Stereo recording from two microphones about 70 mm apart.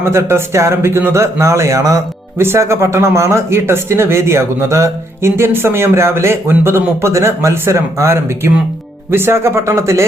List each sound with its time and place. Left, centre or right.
0.0 s speech: right